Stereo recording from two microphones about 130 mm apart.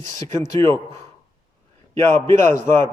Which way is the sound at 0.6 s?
40° right (ahead or behind).